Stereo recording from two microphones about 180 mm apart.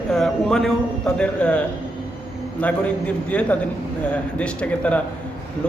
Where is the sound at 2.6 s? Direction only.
5° left (ahead or behind).